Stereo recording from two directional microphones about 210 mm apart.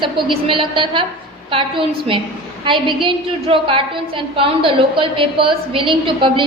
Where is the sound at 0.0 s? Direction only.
25° right (ahead or behind).